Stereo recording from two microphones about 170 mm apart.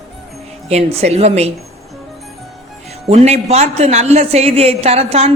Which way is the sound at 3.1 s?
40° right (ahead or behind).